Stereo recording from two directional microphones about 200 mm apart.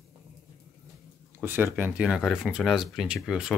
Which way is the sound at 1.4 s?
10° right (ahead or behind).